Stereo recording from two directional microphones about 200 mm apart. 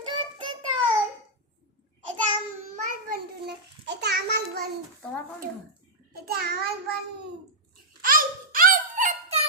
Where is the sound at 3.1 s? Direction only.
55° right (ahead or behind).